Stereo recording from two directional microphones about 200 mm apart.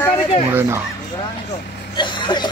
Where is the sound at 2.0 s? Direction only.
25° left (ahead or behind).